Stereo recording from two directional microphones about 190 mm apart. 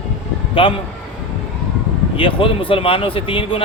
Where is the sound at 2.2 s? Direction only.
25° left (ahead or behind).